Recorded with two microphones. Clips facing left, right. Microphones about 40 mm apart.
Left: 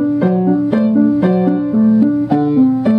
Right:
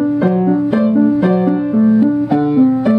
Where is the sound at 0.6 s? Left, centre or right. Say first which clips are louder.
Even; centre.